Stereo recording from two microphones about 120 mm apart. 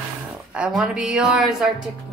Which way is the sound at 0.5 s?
10° right (ahead or behind).